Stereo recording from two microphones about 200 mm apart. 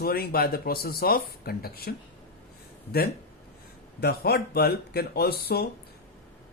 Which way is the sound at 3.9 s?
55° left (ahead or behind).